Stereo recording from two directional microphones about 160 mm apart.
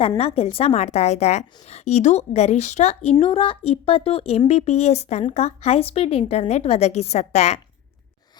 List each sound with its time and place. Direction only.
0.2 s a woman's voice: 35° left (ahead or behind)